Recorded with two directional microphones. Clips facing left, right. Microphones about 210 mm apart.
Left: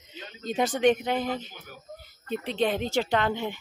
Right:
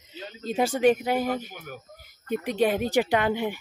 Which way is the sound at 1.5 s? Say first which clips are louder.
Right 7 dB; 55° right (ahead or behind).